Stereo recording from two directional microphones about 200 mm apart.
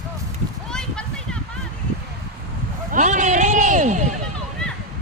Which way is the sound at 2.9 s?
40° right (ahead or behind).